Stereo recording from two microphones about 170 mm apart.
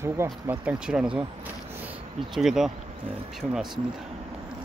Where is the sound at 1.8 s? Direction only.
5° right (ahead or behind).